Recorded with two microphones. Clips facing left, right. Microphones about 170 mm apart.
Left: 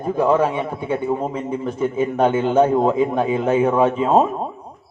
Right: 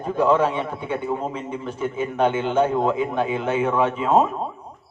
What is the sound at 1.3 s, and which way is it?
A man's voice, 35° left (ahead or behind).